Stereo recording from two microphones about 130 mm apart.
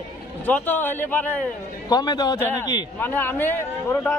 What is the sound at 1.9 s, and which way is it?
Speech, 30° left (ahead or behind).